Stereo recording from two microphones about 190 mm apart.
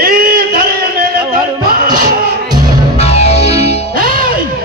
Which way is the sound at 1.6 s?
50° right (ahead or behind).